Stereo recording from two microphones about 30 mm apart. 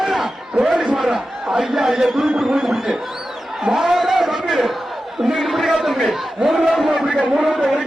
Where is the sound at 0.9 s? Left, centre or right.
Centre.